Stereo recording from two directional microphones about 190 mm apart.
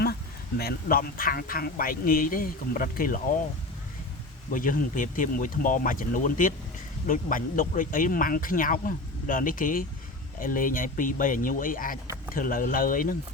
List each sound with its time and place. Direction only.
0.0 s speech: 55° left (ahead or behind)
4.5 s speech: 45° left (ahead or behind)